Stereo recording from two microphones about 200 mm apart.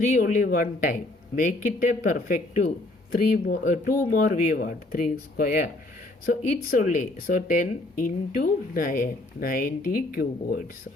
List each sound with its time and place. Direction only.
0.0 s speech: 40° left (ahead or behind)